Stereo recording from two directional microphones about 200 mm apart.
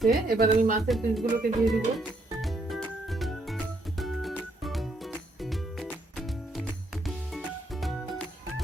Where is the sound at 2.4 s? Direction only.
Centre (ahead or behind).